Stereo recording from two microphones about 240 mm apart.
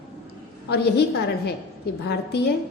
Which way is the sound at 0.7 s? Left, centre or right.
Left.